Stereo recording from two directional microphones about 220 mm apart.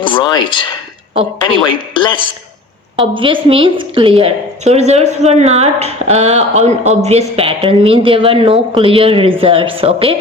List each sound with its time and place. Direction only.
0.0 s speech: 20° left (ahead or behind)
1.6 s speech: 20° left (ahead or behind)
2.9 s a woman's voice: 25° right (ahead or behind)